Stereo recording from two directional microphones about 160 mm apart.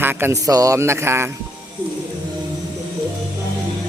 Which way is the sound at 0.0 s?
15° right (ahead or behind).